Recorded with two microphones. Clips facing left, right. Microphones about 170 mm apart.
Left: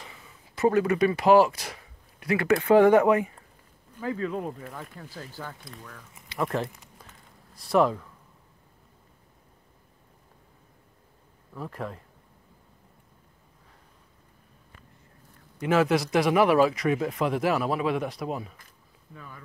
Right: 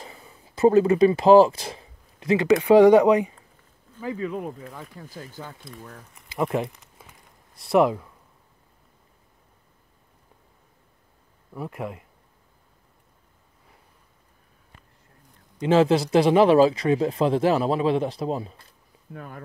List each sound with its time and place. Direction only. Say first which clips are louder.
0.0 s a sound: right 4 dB; 35° right (ahead or behind)
2.6 s speech: right 4 dB; 15° right (ahead or behind); by 4.8 s centre (ahead or behind)
4.9 s speech: right 2 dB; 15° right (ahead or behind)
6.6 s a sound: right 2 dB; centre (ahead or behind)
7.7 s speech: right 3 dB; 10° right (ahead or behind)
11.5 s speech: right 3 dB; 10° right (ahead or behind)
15.6 s speech: right 4 dB; 25° right (ahead or behind)
19.1 s speech: right 7 dB; 55° right (ahead or behind)